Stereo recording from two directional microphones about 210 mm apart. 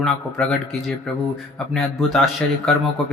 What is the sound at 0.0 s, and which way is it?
Speech, centre (ahead or behind).